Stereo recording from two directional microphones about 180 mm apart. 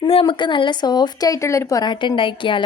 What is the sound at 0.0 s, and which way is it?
A woman's voice, 30° left (ahead or behind).